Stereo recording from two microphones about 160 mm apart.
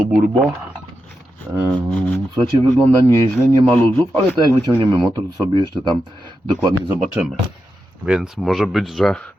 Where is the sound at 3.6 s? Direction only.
10° left (ahead or behind).